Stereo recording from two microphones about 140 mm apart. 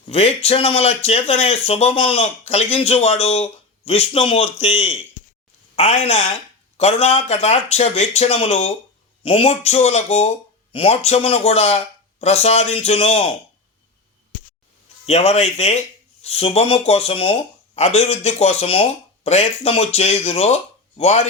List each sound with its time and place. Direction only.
0.1 s speech: 45° left (ahead or behind)
5.7 s speech: 50° left (ahead or behind)
15.0 s speech: 50° left (ahead or behind)